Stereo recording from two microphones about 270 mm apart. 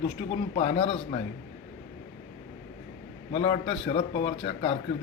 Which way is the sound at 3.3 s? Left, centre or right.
Centre.